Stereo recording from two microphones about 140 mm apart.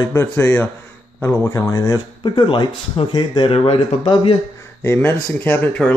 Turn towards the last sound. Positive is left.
turn(degrees=10)  # may be behind; listen again after turning